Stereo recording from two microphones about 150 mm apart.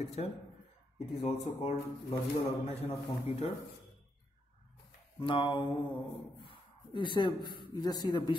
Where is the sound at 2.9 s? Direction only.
45° left (ahead or behind).